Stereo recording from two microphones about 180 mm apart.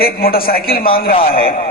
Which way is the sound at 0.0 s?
55° left (ahead or behind).